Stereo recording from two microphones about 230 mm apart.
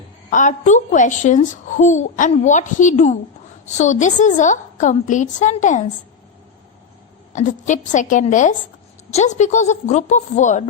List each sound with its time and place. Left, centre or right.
0.3 s a woman's voice: left
7.3 s a woman's voice: left